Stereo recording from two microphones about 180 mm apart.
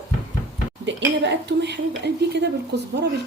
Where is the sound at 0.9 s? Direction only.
80° right.